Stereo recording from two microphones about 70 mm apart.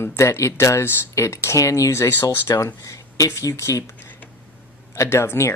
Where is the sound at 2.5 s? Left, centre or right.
Left.